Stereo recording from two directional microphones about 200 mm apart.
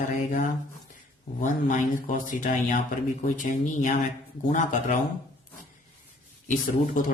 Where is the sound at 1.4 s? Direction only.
40° left (ahead or behind).